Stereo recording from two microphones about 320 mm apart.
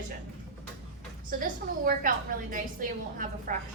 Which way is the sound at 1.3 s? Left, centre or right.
Right.